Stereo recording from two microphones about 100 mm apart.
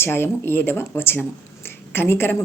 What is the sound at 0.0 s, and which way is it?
Speech, 20° left (ahead or behind).